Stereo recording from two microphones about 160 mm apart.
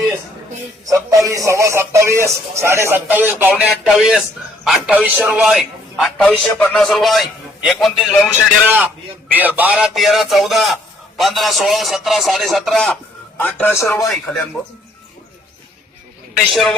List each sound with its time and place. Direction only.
0.9 s a man's voice: 20° right (ahead or behind); by 8.3 s centre (ahead or behind)
8.6 s a man's voice: 10° right (ahead or behind); by 14.1 s 15° left (ahead or behind)
14.1 s a man's voice: 5° left (ahead or behind)
16.5 s a man's voice: centre (ahead or behind)